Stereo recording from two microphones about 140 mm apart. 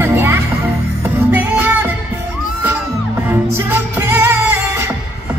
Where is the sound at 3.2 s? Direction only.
15° right (ahead or behind).